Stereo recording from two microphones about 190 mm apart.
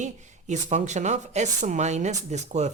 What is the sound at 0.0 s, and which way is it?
Speech, 40° right (ahead or behind).